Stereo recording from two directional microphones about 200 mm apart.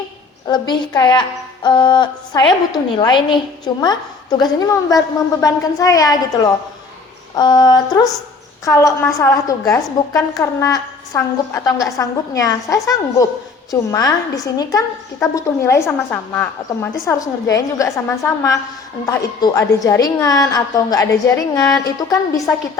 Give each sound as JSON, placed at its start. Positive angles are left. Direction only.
{"t": 0.4, "sound": "a woman's voice", "side_deg": 20}
{"t": 19.0, "sound": "a woman's voice", "side_deg": 20}